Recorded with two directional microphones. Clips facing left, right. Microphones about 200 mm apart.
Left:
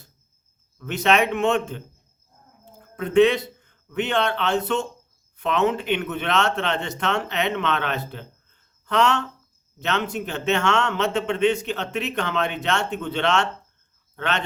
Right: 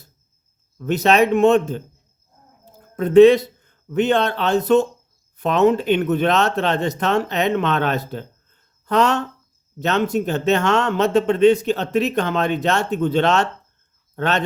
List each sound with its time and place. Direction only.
0.8 s a man's voice: 35° right (ahead or behind)